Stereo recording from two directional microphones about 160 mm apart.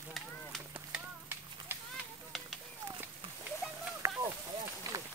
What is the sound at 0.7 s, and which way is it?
Run, 10° right (ahead or behind).